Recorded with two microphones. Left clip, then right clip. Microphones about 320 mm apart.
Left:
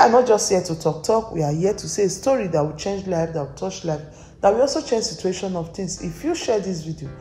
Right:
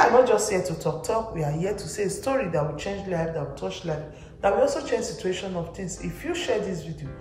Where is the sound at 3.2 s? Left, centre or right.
Centre.